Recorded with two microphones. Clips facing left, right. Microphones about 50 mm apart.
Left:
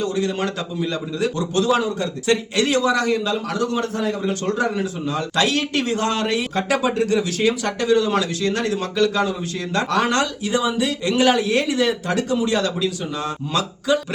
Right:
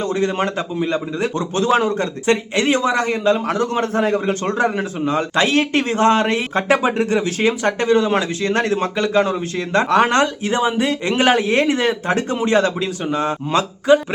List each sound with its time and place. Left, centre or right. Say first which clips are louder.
0.0 s a man's voice: right 3 dB; right